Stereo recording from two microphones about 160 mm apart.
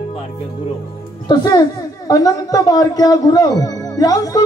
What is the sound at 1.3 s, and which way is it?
A man's voice, 25° left (ahead or behind).